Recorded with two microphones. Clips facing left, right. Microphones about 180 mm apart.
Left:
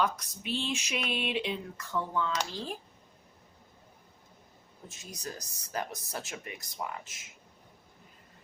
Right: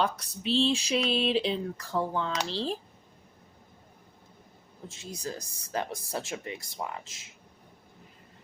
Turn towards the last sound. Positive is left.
turn(degrees=-25)  # may be behind; listen again after turning